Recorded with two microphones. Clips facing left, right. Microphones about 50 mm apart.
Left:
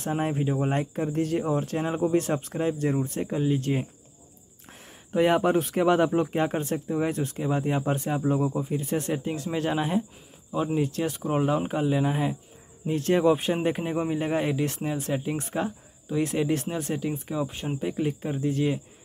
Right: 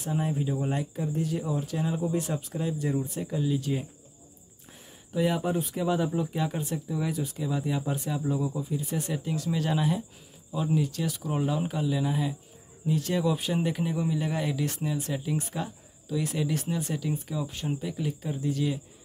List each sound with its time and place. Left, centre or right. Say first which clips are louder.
0.0 s speech: left 3 dB; left
9.1 s speech: left 2 dB; left